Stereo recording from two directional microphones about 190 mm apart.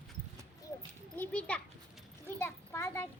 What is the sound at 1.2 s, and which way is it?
Children playing, 5° left (ahead or behind).